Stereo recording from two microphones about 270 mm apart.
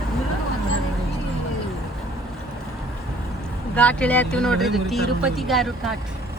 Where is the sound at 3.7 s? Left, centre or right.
Centre.